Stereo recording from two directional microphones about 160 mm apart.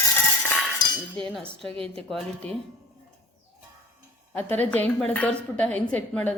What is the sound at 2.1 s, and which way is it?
Speech, 5° left (ahead or behind).